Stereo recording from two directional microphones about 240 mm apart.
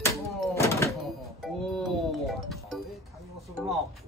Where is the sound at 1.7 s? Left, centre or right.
Centre.